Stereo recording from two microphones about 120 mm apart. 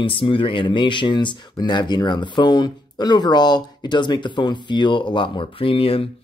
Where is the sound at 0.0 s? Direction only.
45° left (ahead or behind).